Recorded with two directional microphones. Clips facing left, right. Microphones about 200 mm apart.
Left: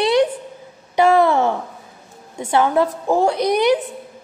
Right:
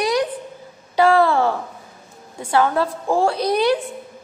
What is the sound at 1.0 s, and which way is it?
A woman's voice, 20° left (ahead or behind).